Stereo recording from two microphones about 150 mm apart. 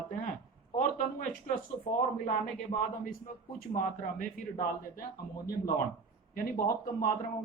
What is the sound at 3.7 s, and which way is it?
Speech, 65° left (ahead or behind).